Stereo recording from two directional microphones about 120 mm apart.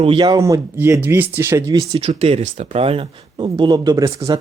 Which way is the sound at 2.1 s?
60° right (ahead or behind).